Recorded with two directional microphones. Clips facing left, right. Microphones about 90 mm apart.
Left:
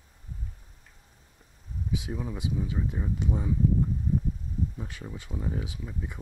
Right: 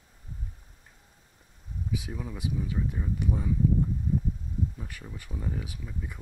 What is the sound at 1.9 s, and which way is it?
Speech, 20° left (ahead or behind).